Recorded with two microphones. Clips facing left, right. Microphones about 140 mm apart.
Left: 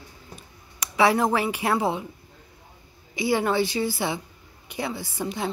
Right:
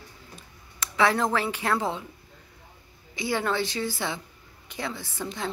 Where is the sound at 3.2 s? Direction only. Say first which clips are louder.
Left 4 dB; 10° left (ahead or behind).